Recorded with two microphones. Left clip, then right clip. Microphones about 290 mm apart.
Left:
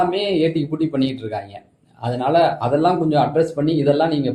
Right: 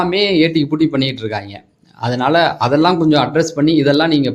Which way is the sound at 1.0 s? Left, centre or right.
Right.